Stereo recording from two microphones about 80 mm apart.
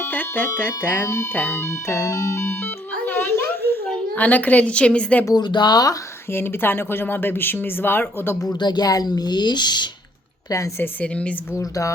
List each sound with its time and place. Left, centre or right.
0.0 s speech: left
1.0 s speech: left
1.3 s speech: left
3.1 s a sound: left
3.8 s speech: centre
5.3 s speech: left
6.3 s speech: left
8.5 s speech: left
11.0 s speech: centre
11.5 s speech: left